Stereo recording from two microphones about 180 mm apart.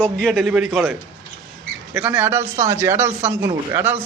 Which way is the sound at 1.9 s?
10° right (ahead or behind).